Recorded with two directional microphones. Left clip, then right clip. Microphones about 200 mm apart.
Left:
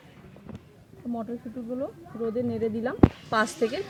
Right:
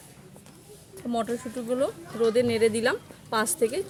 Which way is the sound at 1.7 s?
40° right (ahead or behind).